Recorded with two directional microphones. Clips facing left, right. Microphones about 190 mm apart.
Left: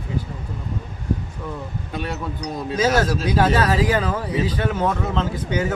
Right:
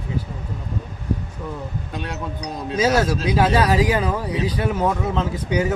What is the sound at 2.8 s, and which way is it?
Speech, 10° right (ahead or behind).